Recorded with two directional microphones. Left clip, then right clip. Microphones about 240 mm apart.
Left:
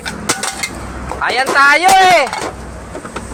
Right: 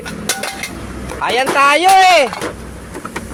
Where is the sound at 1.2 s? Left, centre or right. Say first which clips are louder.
Left 1 dB; right.